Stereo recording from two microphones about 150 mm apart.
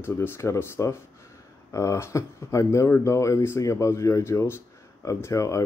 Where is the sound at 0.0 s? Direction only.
15° left (ahead or behind).